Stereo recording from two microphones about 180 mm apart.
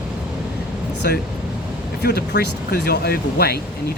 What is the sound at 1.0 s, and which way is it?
Speech, 60° left (ahead or behind).